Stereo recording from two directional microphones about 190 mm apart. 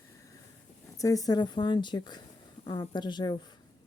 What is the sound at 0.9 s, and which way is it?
A woman's voice, 15° left (ahead or behind).